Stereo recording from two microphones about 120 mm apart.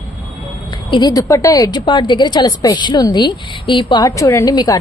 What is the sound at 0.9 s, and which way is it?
A woman's voice, 35° left (ahead or behind).